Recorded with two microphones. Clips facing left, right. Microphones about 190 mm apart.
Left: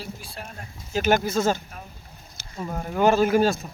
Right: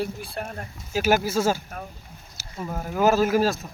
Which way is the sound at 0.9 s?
5° right (ahead or behind).